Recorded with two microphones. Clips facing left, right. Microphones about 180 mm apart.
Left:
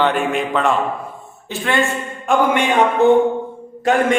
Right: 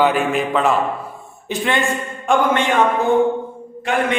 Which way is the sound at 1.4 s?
15° right (ahead or behind).